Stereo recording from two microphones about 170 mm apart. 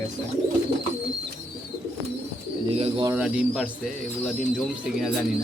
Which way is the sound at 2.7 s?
35° right (ahead or behind).